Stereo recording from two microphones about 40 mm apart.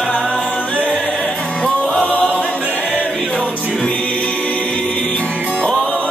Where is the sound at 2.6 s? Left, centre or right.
Right.